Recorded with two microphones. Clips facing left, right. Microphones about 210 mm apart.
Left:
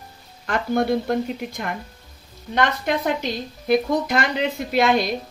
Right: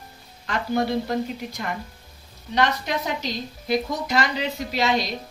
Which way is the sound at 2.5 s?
50° left (ahead or behind).